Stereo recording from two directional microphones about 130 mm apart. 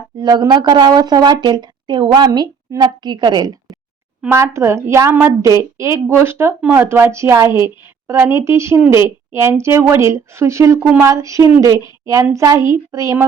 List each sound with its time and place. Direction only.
0.2 s speech: 30° right (ahead or behind)
4.3 s speech: 20° right (ahead or behind)